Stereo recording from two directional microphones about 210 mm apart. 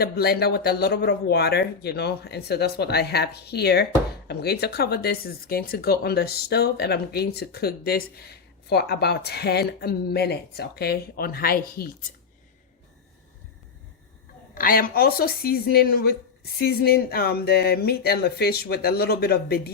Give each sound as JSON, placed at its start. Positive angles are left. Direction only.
{"t": 0.0, "sound": "speech", "side_deg": 50}
{"t": 14.5, "sound": "speech", "side_deg": 45}